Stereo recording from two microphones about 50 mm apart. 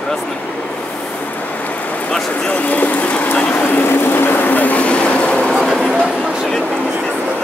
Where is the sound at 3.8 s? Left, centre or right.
Left.